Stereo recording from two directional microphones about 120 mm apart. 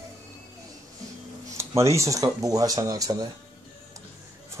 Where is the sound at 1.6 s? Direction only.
25° right (ahead or behind).